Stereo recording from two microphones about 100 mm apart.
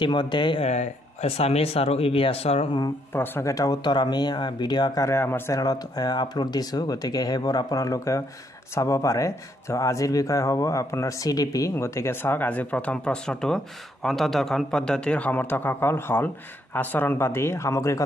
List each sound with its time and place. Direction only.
0.0 s speech: 50° left (ahead or behind)
1.2 s speech: 90° left
3.1 s speech: 20° left (ahead or behind)
3.5 s speech: 40° left (ahead or behind)
5.0 s speech: 25° left (ahead or behind)
5.6 s speech: 40° left (ahead or behind)